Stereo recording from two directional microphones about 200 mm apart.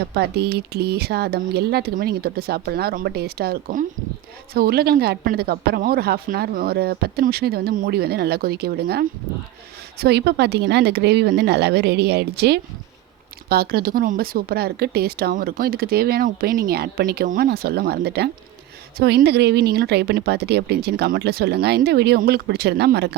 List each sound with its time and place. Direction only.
0.1 s speech: 55° right (ahead or behind)